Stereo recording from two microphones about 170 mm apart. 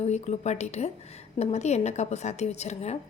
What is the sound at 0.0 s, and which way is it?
A woman's voice, 40° left (ahead or behind).